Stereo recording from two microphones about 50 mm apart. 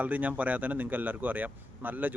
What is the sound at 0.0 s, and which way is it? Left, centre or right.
Speech, right.